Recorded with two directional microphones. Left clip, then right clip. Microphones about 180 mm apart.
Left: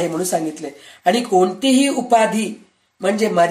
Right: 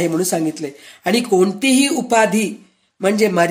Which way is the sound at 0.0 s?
35° right (ahead or behind).